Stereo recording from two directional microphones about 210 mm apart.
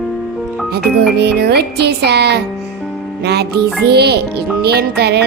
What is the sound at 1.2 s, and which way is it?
Music, 50° right (ahead or behind).